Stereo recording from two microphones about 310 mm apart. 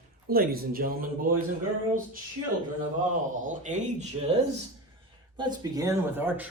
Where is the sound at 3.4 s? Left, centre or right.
Right.